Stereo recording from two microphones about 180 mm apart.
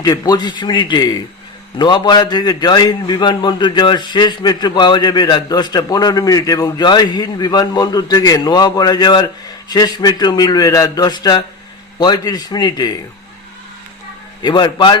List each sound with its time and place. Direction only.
0.0 s a man's voice: 25° left (ahead or behind)
14.4 s a man's voice: 25° left (ahead or behind)